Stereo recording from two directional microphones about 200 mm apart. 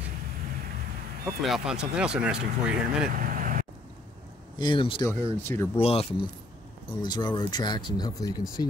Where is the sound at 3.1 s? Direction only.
45° right (ahead or behind).